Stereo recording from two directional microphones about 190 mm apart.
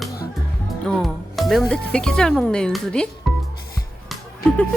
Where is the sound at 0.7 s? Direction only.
Centre (ahead or behind).